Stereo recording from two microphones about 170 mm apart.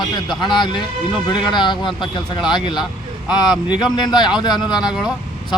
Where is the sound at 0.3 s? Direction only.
25° left (ahead or behind).